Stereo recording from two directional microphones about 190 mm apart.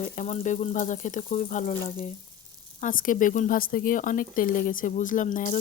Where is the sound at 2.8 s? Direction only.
45° left (ahead or behind).